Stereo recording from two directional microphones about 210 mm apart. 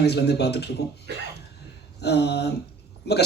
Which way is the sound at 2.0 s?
50° left (ahead or behind).